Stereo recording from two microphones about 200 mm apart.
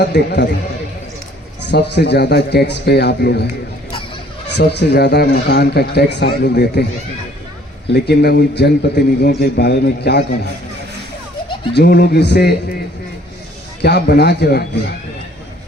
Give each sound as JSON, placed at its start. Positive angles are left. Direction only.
{"t": 0.0, "sound": "a man's voice", "side_deg": 55}
{"t": 1.7, "sound": "a man's voice", "side_deg": 55}
{"t": 4.5, "sound": "a man's voice", "side_deg": 55}
{"t": 7.9, "sound": "a man's voice", "side_deg": 55}
{"t": 11.7, "sound": "a man's voice", "side_deg": 55}
{"t": 13.8, "sound": "a man's voice", "side_deg": 55}